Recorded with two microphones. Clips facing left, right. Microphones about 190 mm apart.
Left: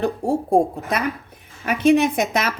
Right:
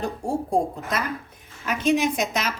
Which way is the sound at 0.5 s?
60° left (ahead or behind).